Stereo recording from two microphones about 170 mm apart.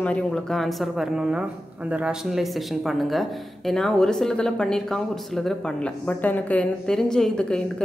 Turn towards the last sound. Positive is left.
turn(degrees=5)  # may be behind; listen again after turning